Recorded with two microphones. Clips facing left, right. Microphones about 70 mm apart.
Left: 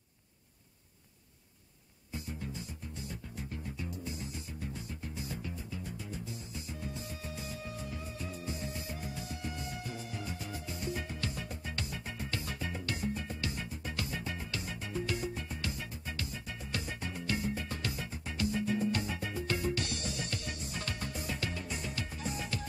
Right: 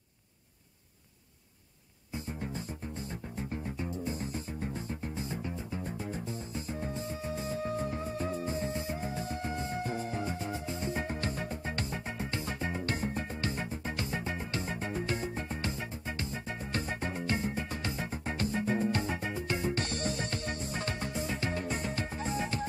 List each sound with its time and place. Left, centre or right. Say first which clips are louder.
2.1 s music: right 3 dB; right
21.5 s music: right 5 dB; right